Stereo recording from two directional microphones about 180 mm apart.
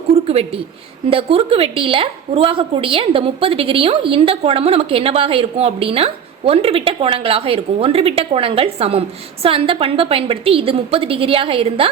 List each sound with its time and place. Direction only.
0.1 s a woman's voice: 35° right (ahead or behind)